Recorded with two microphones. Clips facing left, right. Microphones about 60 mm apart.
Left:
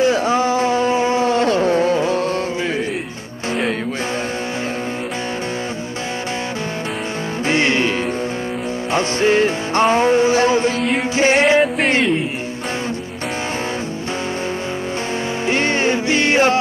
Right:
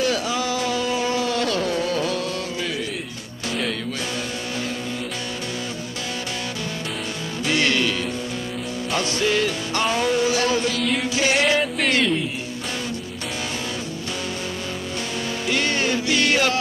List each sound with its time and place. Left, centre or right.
0.0 s carnatic music: left
7.4 s music: left
8.9 s music: left
15.4 s music: left